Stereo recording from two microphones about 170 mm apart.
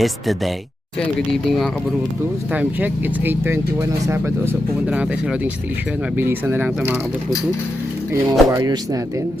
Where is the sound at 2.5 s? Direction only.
10° right (ahead or behind).